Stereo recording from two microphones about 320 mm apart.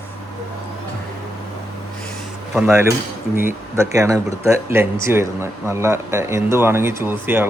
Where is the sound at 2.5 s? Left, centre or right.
Centre.